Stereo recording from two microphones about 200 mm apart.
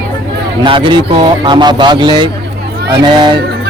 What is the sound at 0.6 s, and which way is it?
Speech, 25° right (ahead or behind).